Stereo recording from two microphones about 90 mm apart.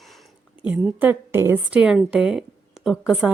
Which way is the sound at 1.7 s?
10° right (ahead or behind).